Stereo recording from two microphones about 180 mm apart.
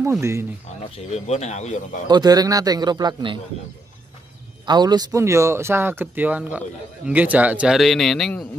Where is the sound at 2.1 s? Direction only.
20° right (ahead or behind).